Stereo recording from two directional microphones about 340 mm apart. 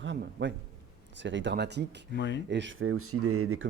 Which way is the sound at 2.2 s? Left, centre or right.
Left.